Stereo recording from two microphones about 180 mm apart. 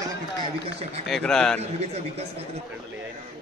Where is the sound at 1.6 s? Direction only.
35° right (ahead or behind).